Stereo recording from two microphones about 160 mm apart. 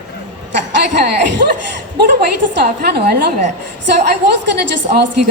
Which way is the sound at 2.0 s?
90° right.